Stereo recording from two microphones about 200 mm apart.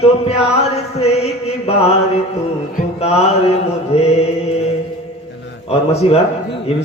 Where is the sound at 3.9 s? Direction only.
30° left (ahead or behind).